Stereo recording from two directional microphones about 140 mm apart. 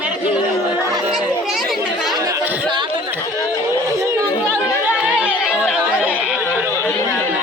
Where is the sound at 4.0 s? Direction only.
20° right (ahead or behind).